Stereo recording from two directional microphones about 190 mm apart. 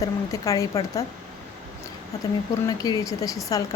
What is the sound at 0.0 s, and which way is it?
Speech, 15° left (ahead or behind).